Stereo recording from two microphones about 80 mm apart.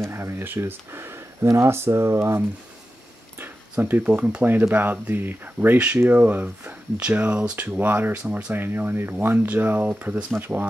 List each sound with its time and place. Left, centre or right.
0.0 s speech: right
3.8 s speech: right